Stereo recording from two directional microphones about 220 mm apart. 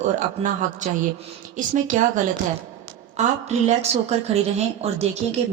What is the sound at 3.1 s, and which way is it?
A woman's voice, 30° right (ahead or behind).